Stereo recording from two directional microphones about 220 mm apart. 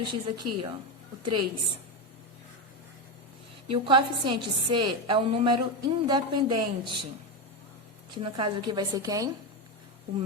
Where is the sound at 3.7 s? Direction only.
20° right (ahead or behind).